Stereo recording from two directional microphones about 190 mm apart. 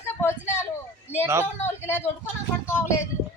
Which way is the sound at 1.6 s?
10° left (ahead or behind).